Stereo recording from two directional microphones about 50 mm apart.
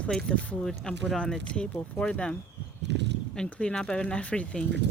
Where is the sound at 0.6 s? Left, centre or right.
Centre.